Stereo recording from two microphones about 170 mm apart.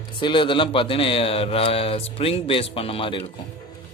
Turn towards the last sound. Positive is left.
turn(degrees=30)  # may be behind; listen again after turning